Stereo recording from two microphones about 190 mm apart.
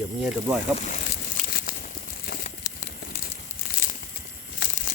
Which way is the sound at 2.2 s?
50° left (ahead or behind).